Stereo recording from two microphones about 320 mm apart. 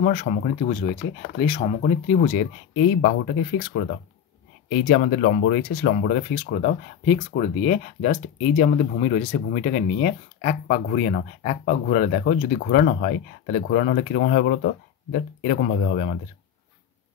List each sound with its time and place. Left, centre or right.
0.0 s speech: left
4.8 s speech: left